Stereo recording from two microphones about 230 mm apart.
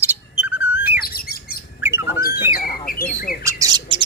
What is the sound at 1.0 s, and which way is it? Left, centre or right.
Bird, left.